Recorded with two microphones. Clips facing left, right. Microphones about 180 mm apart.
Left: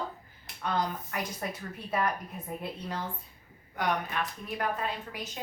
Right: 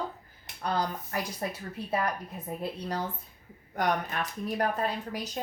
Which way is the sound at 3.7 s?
45° right (ahead or behind).